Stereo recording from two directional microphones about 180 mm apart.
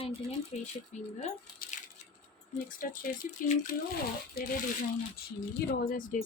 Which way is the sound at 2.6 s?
50° left (ahead or behind).